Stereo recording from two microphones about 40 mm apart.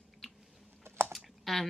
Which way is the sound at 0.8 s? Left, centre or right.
Right.